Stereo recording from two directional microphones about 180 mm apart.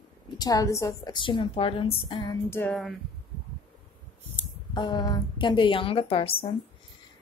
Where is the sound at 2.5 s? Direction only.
10° left (ahead or behind).